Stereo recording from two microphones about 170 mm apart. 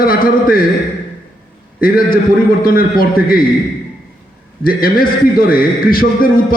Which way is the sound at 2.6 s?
60° left (ahead or behind).